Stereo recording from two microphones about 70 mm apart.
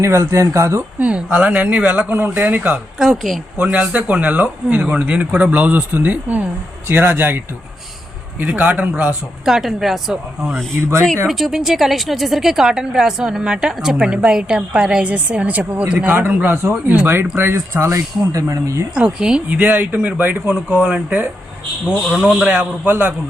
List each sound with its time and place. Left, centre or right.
0.0 s speech: right
0.9 s a woman's voice: centre
2.6 s a woman's voice: centre
3.6 s speech: right
9.4 s a woman's voice: centre
10.8 s speech: right
11.3 s a woman's voice: centre; by 18.9 s right
18.9 s a woman's voice: centre
19.5 s speech: right
20.5 s a woman's voice: centre
22.4 s speech: right